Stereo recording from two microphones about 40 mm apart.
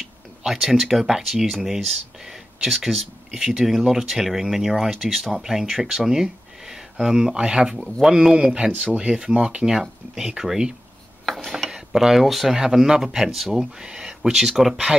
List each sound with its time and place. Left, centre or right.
0.5 s speech: centre
7.3 s speech: right
7.7 s speech: centre
8.7 s speech: right; by 10.7 s centre
11.2 s mechanisms: centre
11.7 s speech: centre
12.5 s speech: centre